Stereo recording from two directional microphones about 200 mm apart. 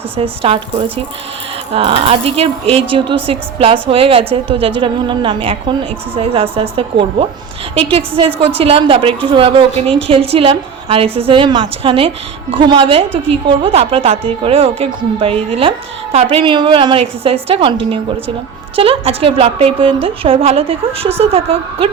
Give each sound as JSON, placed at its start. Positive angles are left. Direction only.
{"t": 0.2, "sound": "a woman's voice", "side_deg": -30}